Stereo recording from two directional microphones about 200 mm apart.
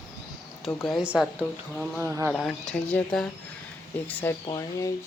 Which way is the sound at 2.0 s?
10° right (ahead or behind).